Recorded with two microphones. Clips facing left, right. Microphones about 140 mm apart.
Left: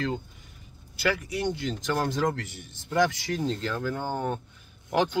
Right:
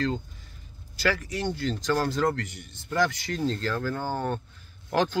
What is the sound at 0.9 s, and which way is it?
Speech, 15° left (ahead or behind).